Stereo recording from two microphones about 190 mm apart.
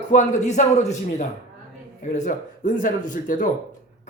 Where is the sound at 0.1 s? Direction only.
40° left (ahead or behind).